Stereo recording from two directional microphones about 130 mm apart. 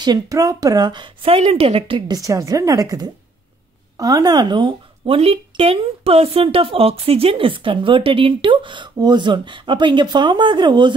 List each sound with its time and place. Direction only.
0.0 s speech: 30° right (ahead or behind)
2.1 s speech: 25° right (ahead or behind)